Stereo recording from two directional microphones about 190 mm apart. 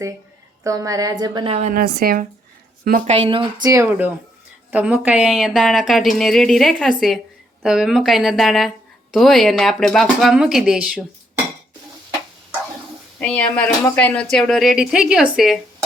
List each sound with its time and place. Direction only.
0.6 s speech: 15° right (ahead or behind)
1.5 s a woman's voice: 40° right (ahead or behind)
1.8 s speech: 55° right (ahead or behind)
3.1 s speech: 30° right (ahead or behind); by 11.0 s 5° right (ahead or behind)
13.1 s speech: 5° left (ahead or behind)